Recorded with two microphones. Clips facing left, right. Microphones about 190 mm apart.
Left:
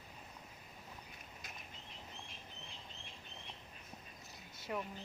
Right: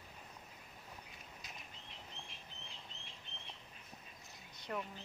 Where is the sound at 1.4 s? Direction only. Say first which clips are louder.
Left 1 dB; 50° left (ahead or behind).